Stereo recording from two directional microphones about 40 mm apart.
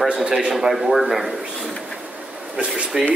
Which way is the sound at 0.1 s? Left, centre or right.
Centre.